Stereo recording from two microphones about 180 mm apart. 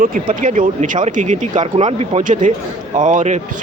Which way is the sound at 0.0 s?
50° right (ahead or behind).